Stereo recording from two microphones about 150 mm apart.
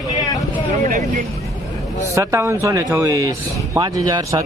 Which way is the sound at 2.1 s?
20° right (ahead or behind).